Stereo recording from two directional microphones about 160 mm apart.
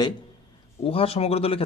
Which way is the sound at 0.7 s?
35° left (ahead or behind).